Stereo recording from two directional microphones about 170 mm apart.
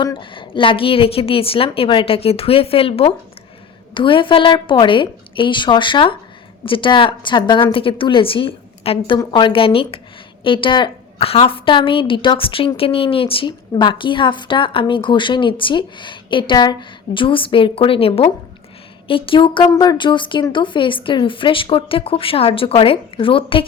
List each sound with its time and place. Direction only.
0.0 s a woman's voice: 30° left (ahead or behind)